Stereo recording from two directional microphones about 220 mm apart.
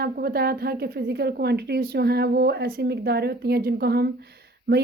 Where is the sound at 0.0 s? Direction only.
45° right (ahead or behind).